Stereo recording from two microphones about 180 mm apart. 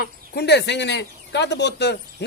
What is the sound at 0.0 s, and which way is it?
Speech, 65° left (ahead or behind).